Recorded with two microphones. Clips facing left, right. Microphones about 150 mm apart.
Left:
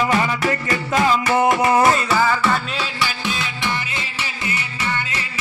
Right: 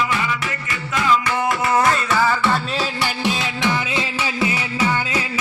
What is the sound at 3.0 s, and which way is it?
Music, 65° right (ahead or behind).